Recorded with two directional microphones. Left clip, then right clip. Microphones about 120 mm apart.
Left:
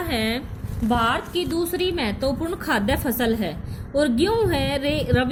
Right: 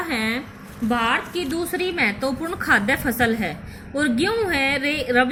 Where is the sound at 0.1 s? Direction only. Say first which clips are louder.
Even; 30° left (ahead or behind).